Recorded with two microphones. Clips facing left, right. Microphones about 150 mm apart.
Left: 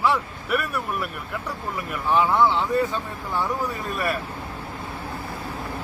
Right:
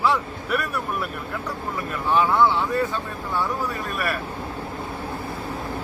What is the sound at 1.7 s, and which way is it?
Speech, 15° left (ahead or behind).